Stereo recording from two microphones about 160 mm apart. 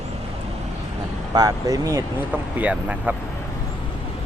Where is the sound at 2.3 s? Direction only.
10° right (ahead or behind).